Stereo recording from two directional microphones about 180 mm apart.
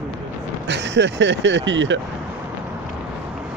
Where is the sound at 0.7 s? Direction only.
80° right.